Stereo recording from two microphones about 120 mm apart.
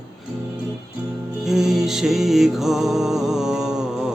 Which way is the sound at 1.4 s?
5° right (ahead or behind).